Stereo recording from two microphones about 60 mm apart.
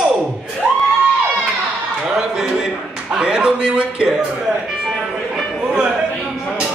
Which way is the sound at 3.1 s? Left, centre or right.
Centre.